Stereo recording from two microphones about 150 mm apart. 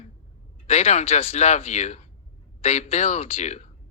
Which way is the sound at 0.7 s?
45° left (ahead or behind).